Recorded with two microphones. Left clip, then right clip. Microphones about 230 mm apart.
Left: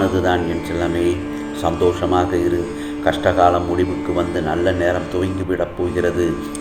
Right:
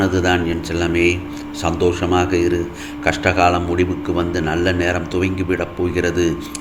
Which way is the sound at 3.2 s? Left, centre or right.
Right.